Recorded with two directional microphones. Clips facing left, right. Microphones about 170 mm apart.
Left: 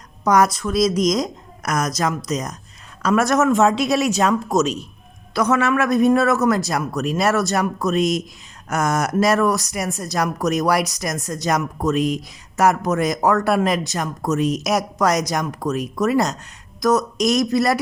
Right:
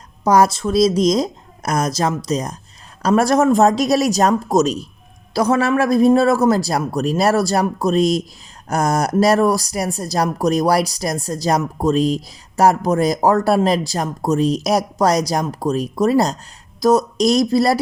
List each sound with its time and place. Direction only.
0.3 s speech: 30° right (ahead or behind)